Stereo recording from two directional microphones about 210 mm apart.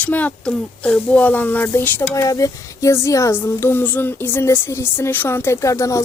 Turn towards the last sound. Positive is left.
turn(degrees=15)  # may be behind; listen again after turning